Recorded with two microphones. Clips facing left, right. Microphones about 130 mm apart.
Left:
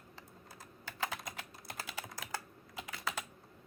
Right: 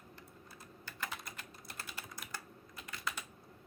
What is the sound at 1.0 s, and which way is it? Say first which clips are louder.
Typing: left 5 dB; 90° left.